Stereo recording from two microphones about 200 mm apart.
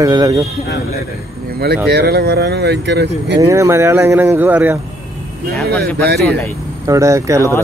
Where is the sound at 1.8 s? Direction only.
55° right (ahead or behind).